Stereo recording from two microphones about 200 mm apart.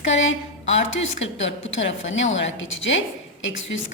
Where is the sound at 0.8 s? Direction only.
65° left (ahead or behind).